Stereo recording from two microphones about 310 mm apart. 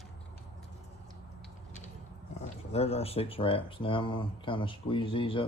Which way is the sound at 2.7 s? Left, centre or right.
Centre.